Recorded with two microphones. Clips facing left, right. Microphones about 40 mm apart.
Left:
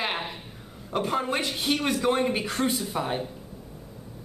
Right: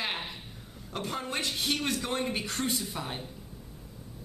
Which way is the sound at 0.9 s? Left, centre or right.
Centre.